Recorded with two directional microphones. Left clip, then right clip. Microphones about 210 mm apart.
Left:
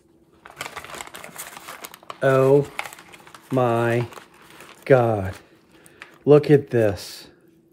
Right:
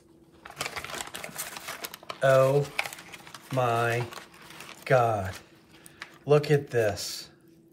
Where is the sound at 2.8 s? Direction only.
10° left (ahead or behind).